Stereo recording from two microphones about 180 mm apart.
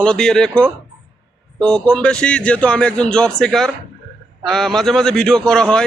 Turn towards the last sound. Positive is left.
turn(degrees=5)  # may be behind; listen again after turning